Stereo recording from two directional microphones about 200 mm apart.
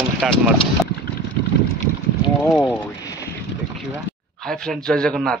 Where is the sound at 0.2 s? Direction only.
Centre (ahead or behind).